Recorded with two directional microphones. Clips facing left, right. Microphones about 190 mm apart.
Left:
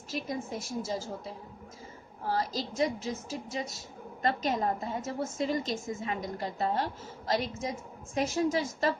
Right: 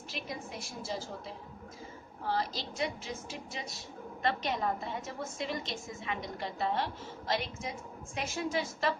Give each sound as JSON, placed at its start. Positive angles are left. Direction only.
{"t": 0.1, "sound": "a woman's voice", "side_deg": 45}
{"t": 2.2, "sound": "a woman's voice", "side_deg": 40}